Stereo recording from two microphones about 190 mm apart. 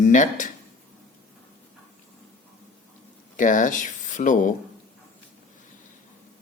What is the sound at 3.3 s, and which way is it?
Speech, 40° left (ahead or behind).